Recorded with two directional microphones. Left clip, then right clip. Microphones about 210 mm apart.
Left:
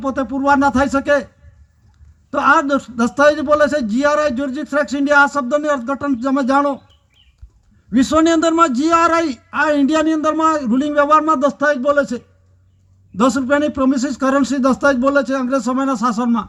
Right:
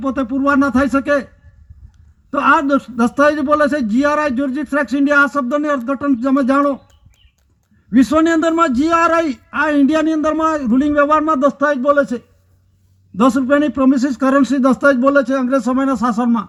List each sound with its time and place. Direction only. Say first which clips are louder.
0.0 s a man's voice: right 1 dB; 35° right (ahead or behind)
2.3 s a man's voice: even; 35° right (ahead or behind)
7.9 s a man's voice: right 1 dB; 35° right (ahead or behind)